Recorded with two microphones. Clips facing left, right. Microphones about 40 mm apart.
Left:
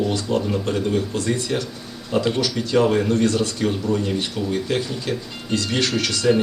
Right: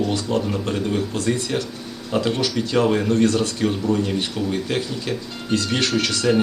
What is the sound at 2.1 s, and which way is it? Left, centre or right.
Speech, centre.